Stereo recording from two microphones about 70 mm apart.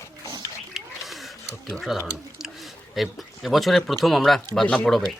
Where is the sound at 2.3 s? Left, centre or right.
Centre.